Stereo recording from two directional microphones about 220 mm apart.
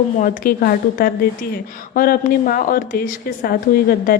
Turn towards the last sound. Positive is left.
turn(degrees=40)  # may be behind; listen again after turning